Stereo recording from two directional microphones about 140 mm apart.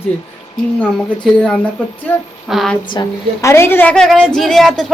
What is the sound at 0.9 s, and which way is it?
Speech, 10° left (ahead or behind).